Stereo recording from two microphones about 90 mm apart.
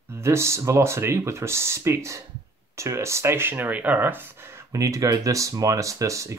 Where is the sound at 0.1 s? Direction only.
30° right (ahead or behind).